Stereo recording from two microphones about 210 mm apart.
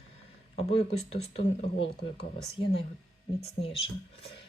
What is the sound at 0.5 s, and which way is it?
Speech, 30° left (ahead or behind).